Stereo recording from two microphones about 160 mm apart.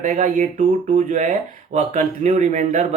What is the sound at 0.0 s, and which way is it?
Speech, 50° right (ahead or behind).